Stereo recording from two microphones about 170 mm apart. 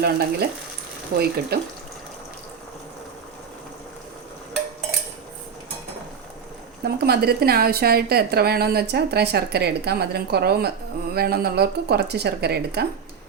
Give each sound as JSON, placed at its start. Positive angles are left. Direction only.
{"t": 0.0, "sound": "a woman's voice", "side_deg": -70}
{"t": 6.8, "sound": "a woman's voice", "side_deg": -70}